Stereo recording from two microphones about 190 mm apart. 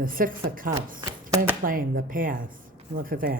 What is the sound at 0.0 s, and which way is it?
Speech, 45° right (ahead or behind).